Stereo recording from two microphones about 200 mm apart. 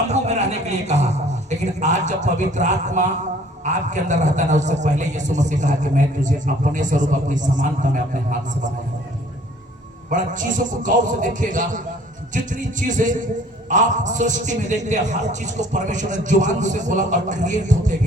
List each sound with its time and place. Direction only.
0.1 s a man's voice: 35° right (ahead or behind)
10.1 s a man's voice: 40° right (ahead or behind)